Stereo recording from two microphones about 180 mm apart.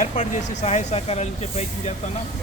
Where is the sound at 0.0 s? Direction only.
40° left (ahead or behind).